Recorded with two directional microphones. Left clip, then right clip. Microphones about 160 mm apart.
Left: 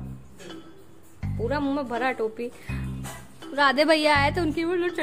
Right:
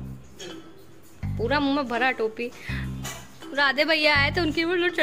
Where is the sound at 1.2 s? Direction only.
Centre (ahead or behind).